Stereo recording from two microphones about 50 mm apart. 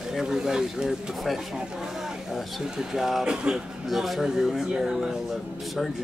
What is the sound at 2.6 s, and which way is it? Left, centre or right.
Speech, centre.